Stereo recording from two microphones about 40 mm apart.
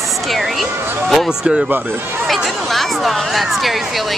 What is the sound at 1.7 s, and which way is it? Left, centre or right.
Speech, right.